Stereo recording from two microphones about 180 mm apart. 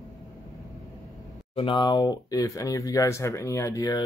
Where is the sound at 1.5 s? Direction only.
30° left (ahead or behind).